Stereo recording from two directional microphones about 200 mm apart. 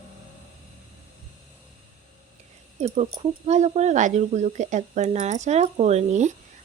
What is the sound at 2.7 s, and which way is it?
Speech, 30° right (ahead or behind).